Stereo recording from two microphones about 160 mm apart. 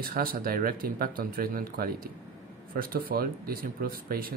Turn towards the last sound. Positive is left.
turn(degrees=-65)  # may be behind; listen again after turning